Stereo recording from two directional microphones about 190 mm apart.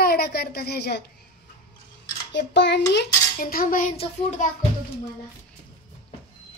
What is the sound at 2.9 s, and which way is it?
Speech, 55° left (ahead or behind).